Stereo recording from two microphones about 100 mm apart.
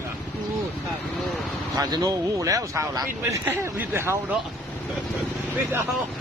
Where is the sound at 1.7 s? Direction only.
40° right (ahead or behind); by 4.4 s 20° right (ahead or behind).